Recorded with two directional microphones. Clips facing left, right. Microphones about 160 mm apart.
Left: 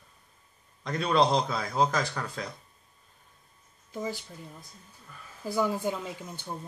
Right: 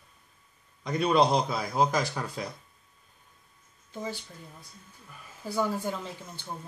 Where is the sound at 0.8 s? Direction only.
5° right (ahead or behind).